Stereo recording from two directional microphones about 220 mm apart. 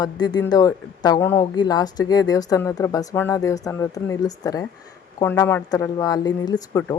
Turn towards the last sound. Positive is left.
turn(degrees=15)  # may be behind; listen again after turning